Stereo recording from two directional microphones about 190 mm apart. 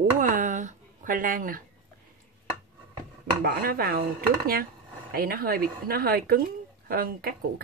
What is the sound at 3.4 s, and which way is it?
Speech, 55° right (ahead or behind).